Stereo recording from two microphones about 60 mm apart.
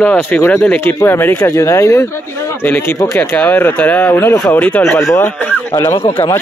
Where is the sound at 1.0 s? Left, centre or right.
Left.